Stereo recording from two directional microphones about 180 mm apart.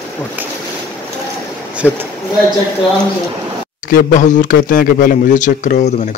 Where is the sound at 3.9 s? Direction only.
45° left (ahead or behind).